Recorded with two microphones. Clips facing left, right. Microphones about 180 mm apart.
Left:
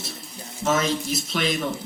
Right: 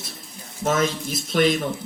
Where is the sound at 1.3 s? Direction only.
50° right (ahead or behind).